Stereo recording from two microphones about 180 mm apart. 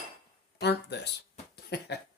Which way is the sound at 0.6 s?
70° left (ahead or behind).